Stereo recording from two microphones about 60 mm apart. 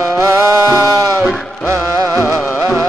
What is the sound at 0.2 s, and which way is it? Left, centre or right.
Music, right.